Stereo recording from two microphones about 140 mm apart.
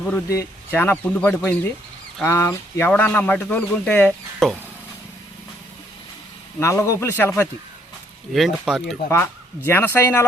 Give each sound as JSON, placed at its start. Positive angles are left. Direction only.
{"t": 0.3, "sound": "speech", "side_deg": 15}
{"t": 4.4, "sound": "speech", "side_deg": 5}
{"t": 6.6, "sound": "speech", "side_deg": 20}
{"t": 8.3, "sound": "speech", "side_deg": 0}
{"t": 9.0, "sound": "speech", "side_deg": 15}